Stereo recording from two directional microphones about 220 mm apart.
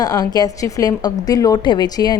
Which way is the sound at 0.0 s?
15° left (ahead or behind).